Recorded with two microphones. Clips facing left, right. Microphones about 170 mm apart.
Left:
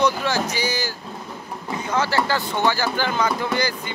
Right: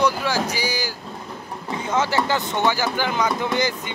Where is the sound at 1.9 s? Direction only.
20° right (ahead or behind).